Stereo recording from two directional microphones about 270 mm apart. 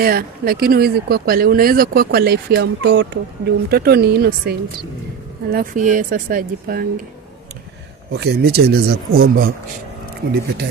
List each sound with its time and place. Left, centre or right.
0.0 s speech: right
8.1 s speech: right